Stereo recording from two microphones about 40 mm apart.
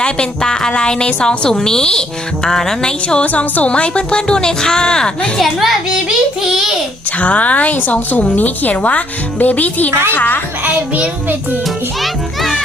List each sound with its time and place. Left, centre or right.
0.0 s a woman's voice: left
3.3 s speech: left; by 5.1 s centre
5.4 s a child's voice: centre
7.2 s a woman's voice: left
9.9 s a child's voice: right
10.2 s speech: left